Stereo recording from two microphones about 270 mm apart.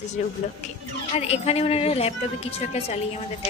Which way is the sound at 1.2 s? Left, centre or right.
Left.